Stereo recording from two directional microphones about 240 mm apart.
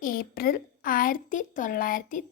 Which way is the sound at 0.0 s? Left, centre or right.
Left.